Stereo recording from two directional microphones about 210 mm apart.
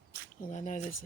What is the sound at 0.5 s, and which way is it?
Speech, 35° left (ahead or behind).